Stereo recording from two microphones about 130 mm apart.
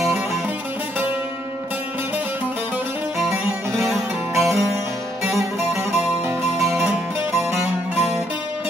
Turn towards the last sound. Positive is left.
turn(degrees=0)  # may be behind; listen again after turning